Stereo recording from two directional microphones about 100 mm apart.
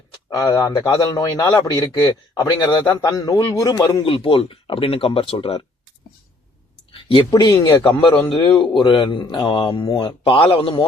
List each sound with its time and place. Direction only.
0.5 s a man's voice: 40° left (ahead or behind)
4.0 s speech: 65° left (ahead or behind)
6.9 s a sound: 60° left (ahead or behind)
7.3 s a man's voice: 45° left (ahead or behind)
7.9 s a man's voice: 15° left (ahead or behind)
8.4 s a man's voice: 60° left (ahead or behind)
10.4 s a man's voice: 70° left (ahead or behind)